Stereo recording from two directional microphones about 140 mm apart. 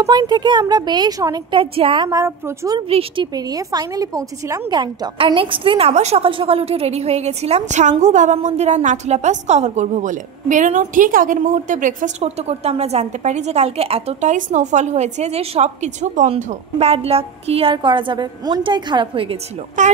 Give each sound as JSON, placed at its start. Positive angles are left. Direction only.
{"t": 0.0, "sound": "speech", "side_deg": -25}
{"t": 2.0, "sound": "a woman's voice", "side_deg": -20}
{"t": 2.9, "sound": "a woman's voice", "side_deg": -40}
{"t": 3.3, "sound": "a woman's voice", "side_deg": -30}
{"t": 12.2, "sound": "a woman's voice", "side_deg": -50}
{"t": 14.3, "sound": "a woman's voice", "side_deg": -60}
{"t": 19.8, "sound": "speech", "side_deg": -60}